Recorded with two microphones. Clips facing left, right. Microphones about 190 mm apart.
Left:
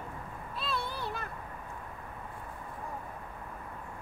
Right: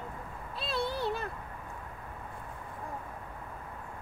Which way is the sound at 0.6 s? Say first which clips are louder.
Right 4 dB; 30° right (ahead or behind).